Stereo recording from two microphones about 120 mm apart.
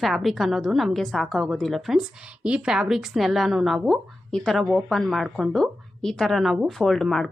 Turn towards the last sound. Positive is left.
turn(degrees=5)  # may be behind; listen again after turning